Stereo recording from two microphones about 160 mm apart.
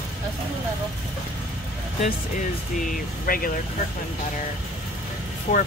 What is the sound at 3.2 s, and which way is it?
Speech, 65° left (ahead or behind).